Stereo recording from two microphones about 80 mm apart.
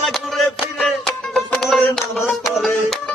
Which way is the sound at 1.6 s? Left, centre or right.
Centre.